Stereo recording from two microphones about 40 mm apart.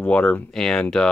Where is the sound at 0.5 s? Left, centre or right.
Centre.